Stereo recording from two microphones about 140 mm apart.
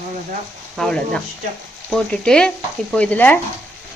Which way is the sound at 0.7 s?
5° left (ahead or behind).